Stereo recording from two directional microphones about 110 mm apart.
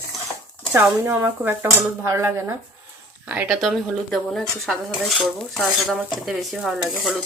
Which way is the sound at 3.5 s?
Centre (ahead or behind).